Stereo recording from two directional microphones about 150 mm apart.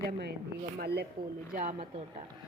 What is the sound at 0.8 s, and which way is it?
Speech, 90° right.